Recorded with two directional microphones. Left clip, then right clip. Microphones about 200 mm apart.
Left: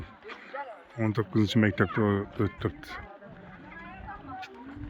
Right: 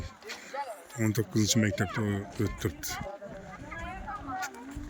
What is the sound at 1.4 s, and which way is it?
Speech, 15° left (ahead or behind).